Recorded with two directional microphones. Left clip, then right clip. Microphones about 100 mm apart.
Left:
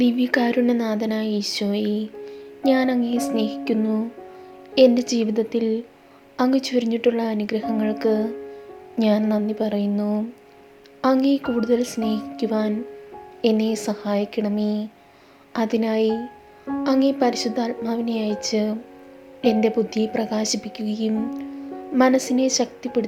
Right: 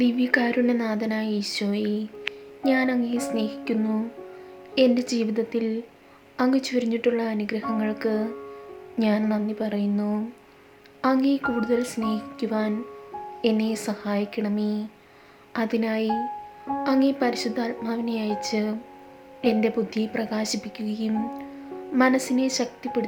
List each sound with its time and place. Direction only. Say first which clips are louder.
0.0 s a woman's voice: left 2 dB; 25° left (ahead or behind)
2.6 s music: left 3 dB; 30° left (ahead or behind)
4.7 s a woman's voice: left 5 dB; 30° left (ahead or behind)